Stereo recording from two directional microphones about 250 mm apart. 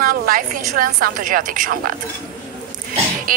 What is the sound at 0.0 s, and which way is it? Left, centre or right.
A woman's voice, right.